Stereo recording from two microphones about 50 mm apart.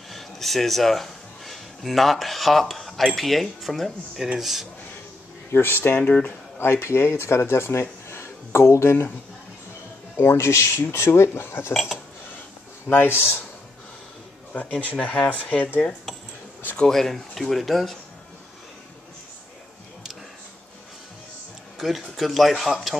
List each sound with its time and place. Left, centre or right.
0.1 s speech: centre
5.5 s speech: left
5.9 s speech: left
6.6 s speech: left
8.1 s a sound: left
10.1 s speech: left
12.9 s speech: left
14.5 s speech: left
16.9 s speech: centre
21.7 s speech: centre